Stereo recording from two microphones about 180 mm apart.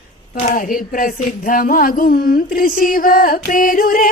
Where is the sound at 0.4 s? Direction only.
50° left (ahead or behind).